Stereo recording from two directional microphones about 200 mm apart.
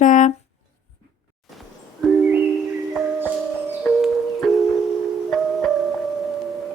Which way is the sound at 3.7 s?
Centre (ahead or behind).